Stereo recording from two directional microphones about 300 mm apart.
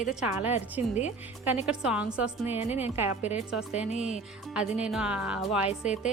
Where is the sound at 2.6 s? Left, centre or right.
Left.